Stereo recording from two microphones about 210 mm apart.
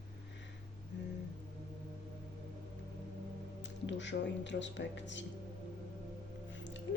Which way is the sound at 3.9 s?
60° left (ahead or behind).